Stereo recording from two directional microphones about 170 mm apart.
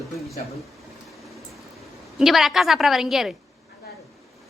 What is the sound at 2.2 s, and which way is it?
A woman's voice, centre (ahead or behind).